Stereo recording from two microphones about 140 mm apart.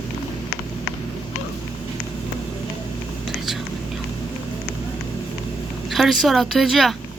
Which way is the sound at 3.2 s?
Centre (ahead or behind).